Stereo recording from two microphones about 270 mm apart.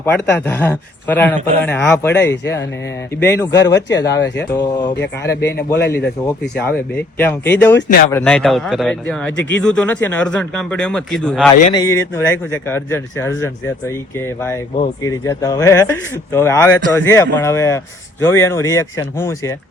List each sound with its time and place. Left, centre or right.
0.0 s speech: centre
2.2 s speech: left
3.2 s speech: centre
7.8 s speech: left
8.1 s speech: centre
15.0 s speech: centre